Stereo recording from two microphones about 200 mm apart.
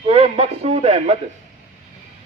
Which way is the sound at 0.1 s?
30° right (ahead or behind).